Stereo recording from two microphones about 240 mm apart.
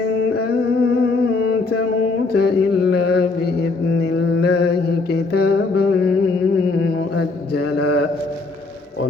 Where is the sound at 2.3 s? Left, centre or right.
Left.